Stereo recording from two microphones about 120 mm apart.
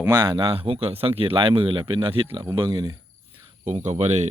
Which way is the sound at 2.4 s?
35° right (ahead or behind).